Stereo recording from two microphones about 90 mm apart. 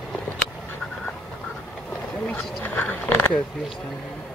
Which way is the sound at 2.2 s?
15° left (ahead or behind).